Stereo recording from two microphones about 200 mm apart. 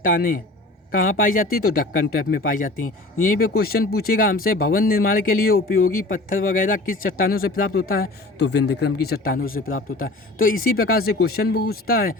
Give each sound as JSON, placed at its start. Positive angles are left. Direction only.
{"t": 0.0, "sound": "speech", "side_deg": 45}